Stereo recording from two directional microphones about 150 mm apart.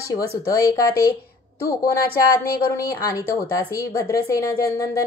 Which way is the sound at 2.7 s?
20° left (ahead or behind).